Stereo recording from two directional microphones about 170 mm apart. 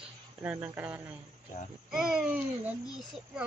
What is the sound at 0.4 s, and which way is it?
Speech, 10° right (ahead or behind).